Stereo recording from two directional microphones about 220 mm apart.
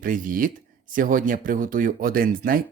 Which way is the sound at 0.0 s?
40° right (ahead or behind).